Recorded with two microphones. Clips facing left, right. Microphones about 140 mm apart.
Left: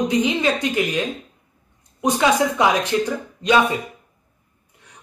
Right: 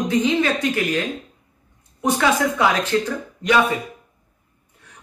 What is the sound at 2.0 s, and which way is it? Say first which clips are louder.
Speech: left 1 dB; 20° left (ahead or behind).